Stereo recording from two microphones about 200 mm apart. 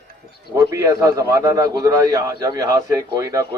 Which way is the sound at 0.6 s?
15° right (ahead or behind).